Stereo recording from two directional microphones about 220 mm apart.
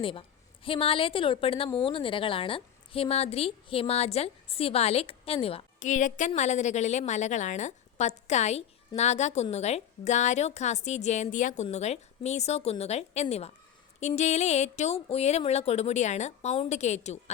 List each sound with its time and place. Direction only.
0.0 s a woman's voice: 25° left (ahead or behind)